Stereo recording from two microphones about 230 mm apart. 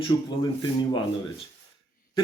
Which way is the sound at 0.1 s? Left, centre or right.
Centre.